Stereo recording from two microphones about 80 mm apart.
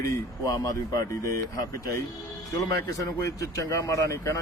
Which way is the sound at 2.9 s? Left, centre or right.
Left.